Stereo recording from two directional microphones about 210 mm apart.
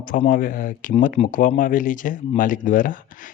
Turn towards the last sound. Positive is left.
turn(degrees=40)  # may be behind; listen again after turning